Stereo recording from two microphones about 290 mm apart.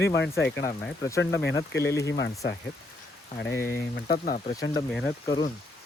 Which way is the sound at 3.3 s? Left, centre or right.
Centre.